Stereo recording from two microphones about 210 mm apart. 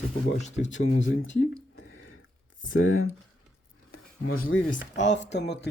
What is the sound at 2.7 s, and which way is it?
Speech, 75° left (ahead or behind).